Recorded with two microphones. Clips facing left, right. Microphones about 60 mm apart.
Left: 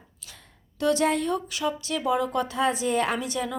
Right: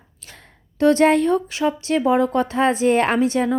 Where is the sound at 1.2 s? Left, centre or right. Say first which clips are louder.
Right 8 dB; right.